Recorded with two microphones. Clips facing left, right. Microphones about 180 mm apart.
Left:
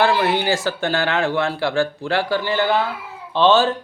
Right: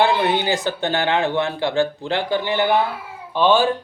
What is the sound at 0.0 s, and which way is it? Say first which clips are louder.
Speech: even; 20° right (ahead or behind).